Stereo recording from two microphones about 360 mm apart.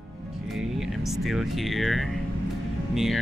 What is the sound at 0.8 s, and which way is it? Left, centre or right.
Speech, centre.